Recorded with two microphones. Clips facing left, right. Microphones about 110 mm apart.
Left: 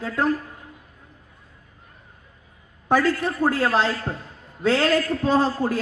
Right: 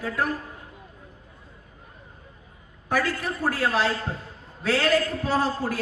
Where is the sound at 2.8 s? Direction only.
25° left (ahead or behind).